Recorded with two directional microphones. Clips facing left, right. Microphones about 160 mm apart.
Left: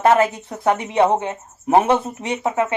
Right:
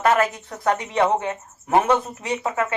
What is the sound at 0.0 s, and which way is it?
Speech, 25° left (ahead or behind).